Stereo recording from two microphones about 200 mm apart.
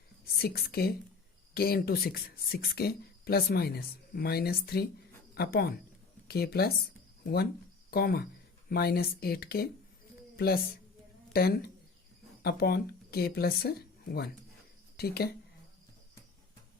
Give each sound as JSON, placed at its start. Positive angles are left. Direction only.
{"t": 0.4, "sound": "speech", "side_deg": 50}
{"t": 7.9, "sound": "speech", "side_deg": 50}